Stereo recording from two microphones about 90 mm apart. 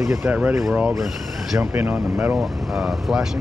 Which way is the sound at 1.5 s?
20° right (ahead or behind).